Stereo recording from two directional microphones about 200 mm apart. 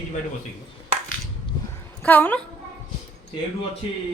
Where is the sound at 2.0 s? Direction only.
10° left (ahead or behind).